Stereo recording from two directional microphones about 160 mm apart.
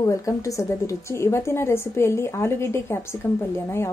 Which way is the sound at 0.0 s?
20° left (ahead or behind).